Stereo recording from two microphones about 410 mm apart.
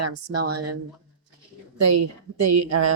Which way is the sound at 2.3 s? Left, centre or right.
Right.